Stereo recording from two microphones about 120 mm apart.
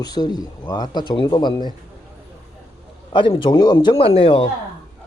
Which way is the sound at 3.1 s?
45° left (ahead or behind).